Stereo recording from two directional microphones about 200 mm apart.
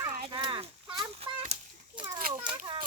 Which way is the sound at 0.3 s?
25° right (ahead or behind).